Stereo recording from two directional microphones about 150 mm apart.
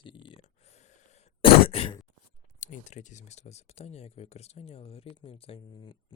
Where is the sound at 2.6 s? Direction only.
55° left (ahead or behind).